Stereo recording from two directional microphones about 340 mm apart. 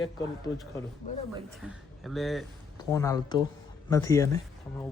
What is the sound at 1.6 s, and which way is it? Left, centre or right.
Speech, centre.